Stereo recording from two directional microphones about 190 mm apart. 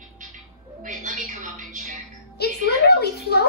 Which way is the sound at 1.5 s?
45° right (ahead or behind).